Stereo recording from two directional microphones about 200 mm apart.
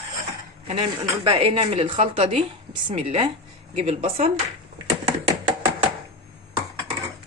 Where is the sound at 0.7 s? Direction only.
30° right (ahead or behind).